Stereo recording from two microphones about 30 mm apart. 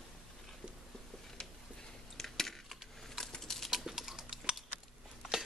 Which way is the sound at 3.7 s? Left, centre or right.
Centre.